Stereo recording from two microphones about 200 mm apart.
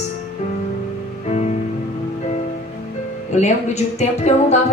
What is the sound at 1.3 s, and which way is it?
Music, 35° left (ahead or behind).